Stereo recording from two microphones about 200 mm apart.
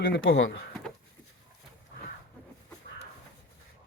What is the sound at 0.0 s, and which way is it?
Speech, 50° left (ahead or behind).